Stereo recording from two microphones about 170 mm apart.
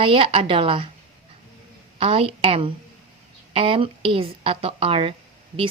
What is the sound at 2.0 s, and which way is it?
A woman's voice, 35° right (ahead or behind).